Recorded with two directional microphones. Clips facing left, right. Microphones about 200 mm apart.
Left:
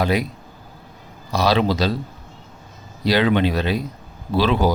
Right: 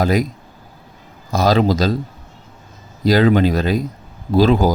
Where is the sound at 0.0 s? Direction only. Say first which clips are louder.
Right 3 dB; 45° right (ahead or behind).